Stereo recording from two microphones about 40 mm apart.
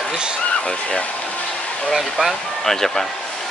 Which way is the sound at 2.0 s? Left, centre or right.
Centre.